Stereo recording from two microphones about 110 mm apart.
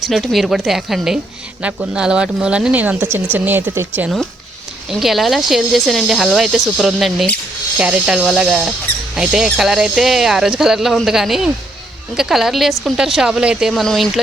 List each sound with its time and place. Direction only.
0.1 s speech: centre (ahead or behind); by 4.1 s 20° right (ahead or behind)
4.9 s speech: centre (ahead or behind)